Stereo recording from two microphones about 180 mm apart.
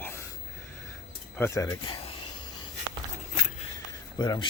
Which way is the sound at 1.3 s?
15° left (ahead or behind).